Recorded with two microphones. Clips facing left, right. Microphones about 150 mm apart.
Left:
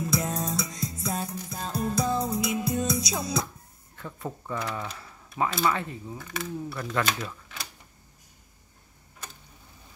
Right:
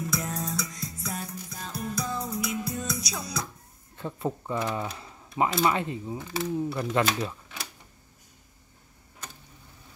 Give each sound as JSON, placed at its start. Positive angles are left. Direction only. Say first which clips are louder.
{"t": 0.0, "sound": "music", "louder": "left 3 dB", "side_deg": 25}
{"t": 3.9, "sound": "speech", "louder": "right 5 dB", "side_deg": -20}